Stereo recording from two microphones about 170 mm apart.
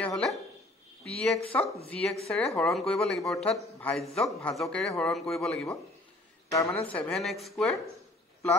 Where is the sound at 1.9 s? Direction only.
5° left (ahead or behind).